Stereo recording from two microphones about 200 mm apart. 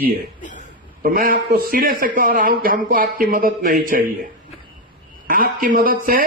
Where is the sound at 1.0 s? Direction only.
45° right (ahead or behind).